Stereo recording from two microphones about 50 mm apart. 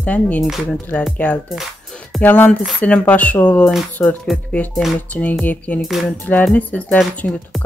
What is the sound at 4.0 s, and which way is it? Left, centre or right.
Speech, left.